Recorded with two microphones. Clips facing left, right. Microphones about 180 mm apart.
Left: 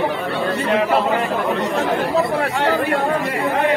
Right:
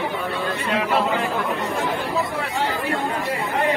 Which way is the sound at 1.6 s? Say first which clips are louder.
Left 5 dB; 80° left.